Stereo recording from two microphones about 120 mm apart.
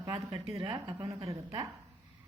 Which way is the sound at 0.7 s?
25° right (ahead or behind).